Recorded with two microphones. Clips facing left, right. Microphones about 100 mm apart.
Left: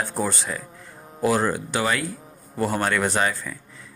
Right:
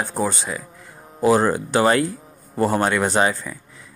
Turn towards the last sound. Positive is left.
turn(degrees=-20)  # may be behind; listen again after turning